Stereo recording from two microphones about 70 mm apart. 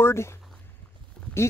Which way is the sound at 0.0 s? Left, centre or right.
Left.